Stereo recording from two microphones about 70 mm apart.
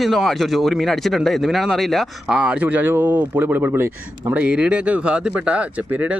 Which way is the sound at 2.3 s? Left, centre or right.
Centre.